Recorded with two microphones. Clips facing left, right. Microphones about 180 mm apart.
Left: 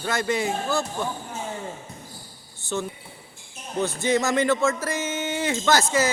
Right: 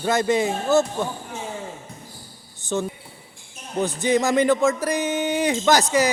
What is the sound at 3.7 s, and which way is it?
Speech, 15° right (ahead or behind).